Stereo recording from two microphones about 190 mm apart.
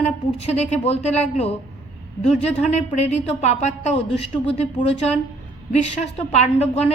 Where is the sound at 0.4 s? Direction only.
35° left (ahead or behind).